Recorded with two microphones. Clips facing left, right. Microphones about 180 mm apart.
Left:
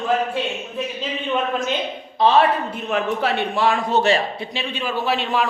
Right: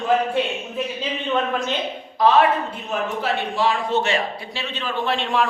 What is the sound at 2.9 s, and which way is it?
Speech, 60° left (ahead or behind).